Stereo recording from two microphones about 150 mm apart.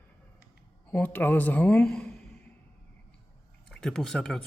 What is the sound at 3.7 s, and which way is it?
Speech, 5° left (ahead or behind).